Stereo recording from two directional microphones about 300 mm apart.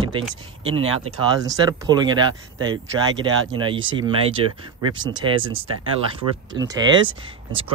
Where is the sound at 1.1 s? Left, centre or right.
Centre.